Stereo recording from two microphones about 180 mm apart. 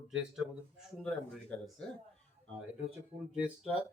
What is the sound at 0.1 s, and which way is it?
Speech, 5° right (ahead or behind).